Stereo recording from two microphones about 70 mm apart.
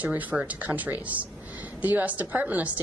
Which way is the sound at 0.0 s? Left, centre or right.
Right.